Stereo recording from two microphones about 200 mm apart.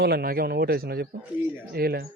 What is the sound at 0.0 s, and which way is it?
Speech, 50° right (ahead or behind).